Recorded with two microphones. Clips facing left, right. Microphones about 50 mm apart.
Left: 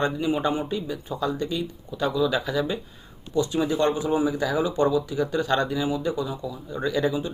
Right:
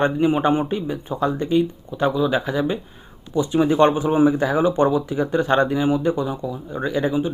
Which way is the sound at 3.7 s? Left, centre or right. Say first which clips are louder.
Right 6 dB; right.